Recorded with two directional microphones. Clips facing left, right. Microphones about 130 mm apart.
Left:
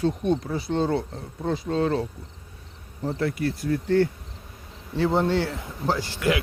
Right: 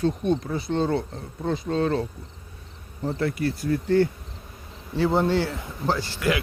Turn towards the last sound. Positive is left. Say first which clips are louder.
# even
turn(degrees=20)  # may be behind; listen again after turning